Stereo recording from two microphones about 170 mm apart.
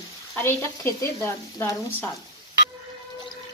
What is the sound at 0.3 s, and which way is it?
Speech, 15° left (ahead or behind).